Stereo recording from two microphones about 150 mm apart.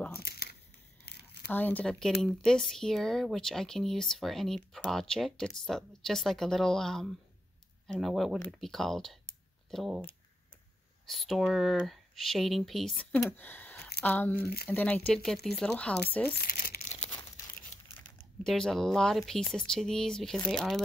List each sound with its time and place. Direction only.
0.2 s a sound: 90° left
1.5 s speech: 10° left (ahead or behind)
11.1 s speech: centre (ahead or behind)
16.3 s speech: 70° left (ahead or behind)
17.9 s speech: 5° left (ahead or behind)